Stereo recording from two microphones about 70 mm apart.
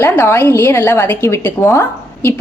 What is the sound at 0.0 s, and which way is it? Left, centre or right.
A woman's voice, left.